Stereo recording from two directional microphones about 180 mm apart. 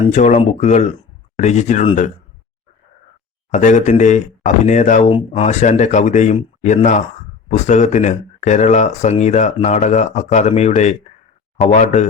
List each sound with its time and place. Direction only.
0.1 s speech: 40° left (ahead or behind)
3.5 s speech: 40° left (ahead or behind)